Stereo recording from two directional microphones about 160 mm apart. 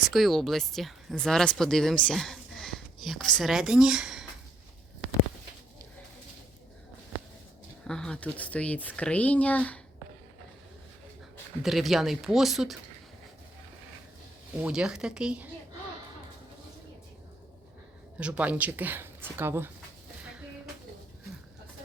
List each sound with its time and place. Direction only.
0.0 s speech: centre (ahead or behind)
7.9 s speech: 5° left (ahead or behind)
11.6 s speech: centre (ahead or behind)
14.6 s speech: 5° right (ahead or behind)
18.2 s speech: 10° right (ahead or behind)